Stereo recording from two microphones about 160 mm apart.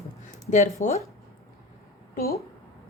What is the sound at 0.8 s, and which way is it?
Speech, 50° left (ahead or behind).